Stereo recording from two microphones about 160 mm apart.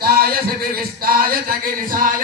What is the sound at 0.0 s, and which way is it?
A man's voice, 70° right (ahead or behind).